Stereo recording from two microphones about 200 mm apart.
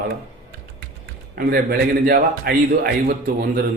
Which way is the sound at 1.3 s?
50° right (ahead or behind).